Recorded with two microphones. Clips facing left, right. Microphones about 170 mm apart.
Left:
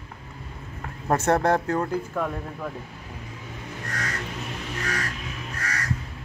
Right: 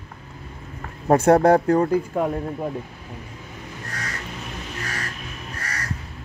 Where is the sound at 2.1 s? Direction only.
25° right (ahead or behind).